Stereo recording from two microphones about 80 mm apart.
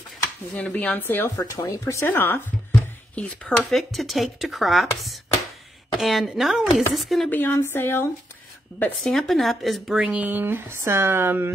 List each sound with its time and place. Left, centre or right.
0.6 s speech: centre
1.3 s speech: left
2.0 s speech: left
2.7 s a sound: centre
3.7 s speech: centre
7.2 s speech: left
9.0 s speech: centre
10.0 s speech: centre